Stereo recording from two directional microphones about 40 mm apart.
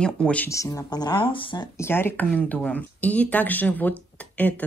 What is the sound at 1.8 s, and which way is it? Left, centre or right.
Speech, left.